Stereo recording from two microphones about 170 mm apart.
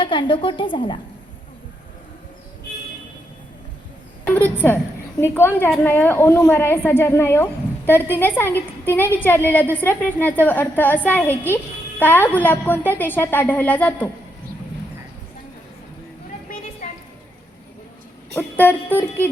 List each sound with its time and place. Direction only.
0.0 s a woman's voice: 30° left (ahead or behind)
4.4 s a woman's voice: 10° left (ahead or behind)
16.8 s a sound: 45° left (ahead or behind)
18.3 s music: 10° left (ahead or behind)